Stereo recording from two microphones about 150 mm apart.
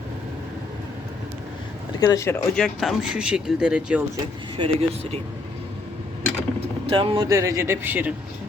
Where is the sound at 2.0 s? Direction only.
20° left (ahead or behind).